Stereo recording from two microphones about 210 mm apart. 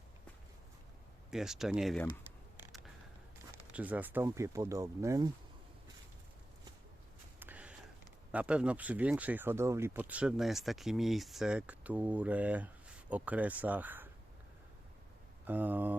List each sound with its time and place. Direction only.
1.3 s speech: centre (ahead or behind)
3.5 s speech: 5° right (ahead or behind)
7.3 s a sound: 10° right (ahead or behind)
8.3 s speech: 5° right (ahead or behind)
15.4 s speech: 10° right (ahead or behind)